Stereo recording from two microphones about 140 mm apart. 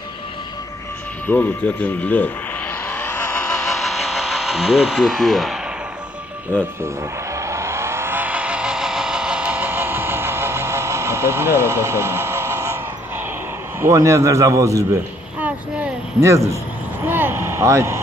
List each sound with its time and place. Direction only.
1.2 s speech: 15° left (ahead or behind)
2.9 s vehicle: 15° left (ahead or behind)
3.6 s electric shaver: centre (ahead or behind)
7.3 s vehicle: 20° right (ahead or behind)
13.7 s a man's voice: 20° right (ahead or behind)
15.4 s a sound: 15° right (ahead or behind)